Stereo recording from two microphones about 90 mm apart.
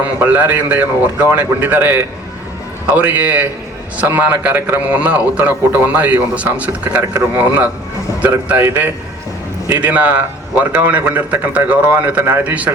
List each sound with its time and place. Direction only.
0.0 s a man's voice: 20° right (ahead or behind)